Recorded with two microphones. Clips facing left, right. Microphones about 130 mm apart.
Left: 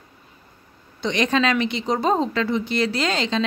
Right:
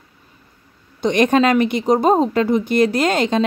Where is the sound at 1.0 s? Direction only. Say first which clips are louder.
Right 6 dB; 50° right (ahead or behind).